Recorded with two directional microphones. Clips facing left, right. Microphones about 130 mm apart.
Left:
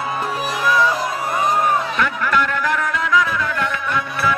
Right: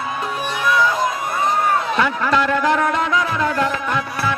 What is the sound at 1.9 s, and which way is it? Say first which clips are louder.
Music: right 2 dB; 25° right (ahead or behind).